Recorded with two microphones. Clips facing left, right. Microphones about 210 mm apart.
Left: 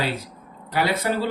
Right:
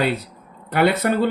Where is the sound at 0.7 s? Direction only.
55° right (ahead or behind).